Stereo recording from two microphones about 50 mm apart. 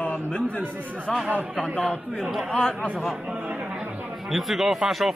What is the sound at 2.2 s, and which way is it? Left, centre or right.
Speech, centre.